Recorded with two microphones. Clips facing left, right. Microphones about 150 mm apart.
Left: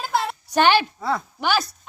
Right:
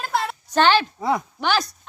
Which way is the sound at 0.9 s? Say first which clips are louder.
Right 2 dB; 20° right (ahead or behind).